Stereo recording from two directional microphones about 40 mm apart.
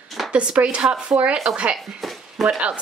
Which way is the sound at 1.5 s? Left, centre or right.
Right.